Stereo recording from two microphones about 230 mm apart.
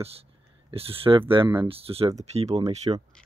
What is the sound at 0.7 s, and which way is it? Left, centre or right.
Speech, right.